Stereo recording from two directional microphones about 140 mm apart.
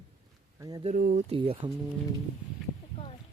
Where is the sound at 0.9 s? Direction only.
80° right.